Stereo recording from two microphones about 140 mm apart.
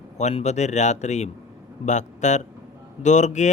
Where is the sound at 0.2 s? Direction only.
55° left (ahead or behind).